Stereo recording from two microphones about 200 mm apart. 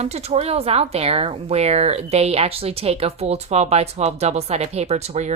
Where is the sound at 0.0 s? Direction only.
30° right (ahead or behind).